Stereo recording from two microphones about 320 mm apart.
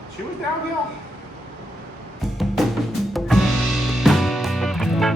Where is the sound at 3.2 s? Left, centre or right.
Centre.